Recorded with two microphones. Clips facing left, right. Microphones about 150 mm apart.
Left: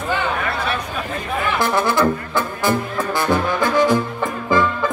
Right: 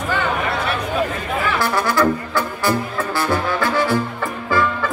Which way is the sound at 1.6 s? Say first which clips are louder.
Left 1 dB; 20° left (ahead or behind).